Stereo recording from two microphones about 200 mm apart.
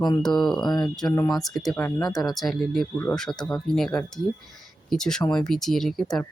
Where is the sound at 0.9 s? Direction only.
5° left (ahead or behind).